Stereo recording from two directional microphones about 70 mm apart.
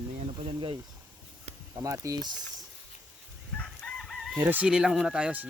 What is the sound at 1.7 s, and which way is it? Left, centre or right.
Speech, right.